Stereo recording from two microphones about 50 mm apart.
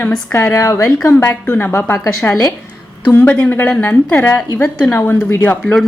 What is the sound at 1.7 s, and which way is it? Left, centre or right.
Speech, left.